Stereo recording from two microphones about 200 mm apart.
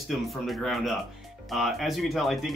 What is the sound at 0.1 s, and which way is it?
Speech, centre (ahead or behind).